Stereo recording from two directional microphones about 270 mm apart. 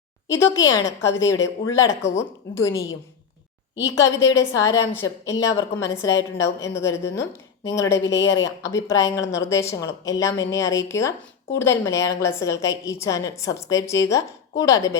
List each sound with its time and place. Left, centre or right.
0.3 s a woman's voice: centre
8.0 s speech: left
8.4 s a woman's voice: centre